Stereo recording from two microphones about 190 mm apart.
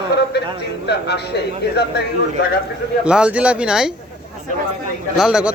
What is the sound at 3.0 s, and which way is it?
Speech, 5° right (ahead or behind).